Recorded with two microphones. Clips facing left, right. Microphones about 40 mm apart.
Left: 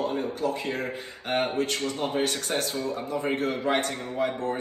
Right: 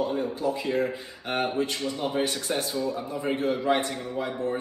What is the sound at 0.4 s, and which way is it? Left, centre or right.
Speech, left.